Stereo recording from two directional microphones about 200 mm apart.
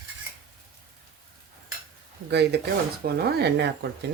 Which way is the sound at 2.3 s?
60° right (ahead or behind).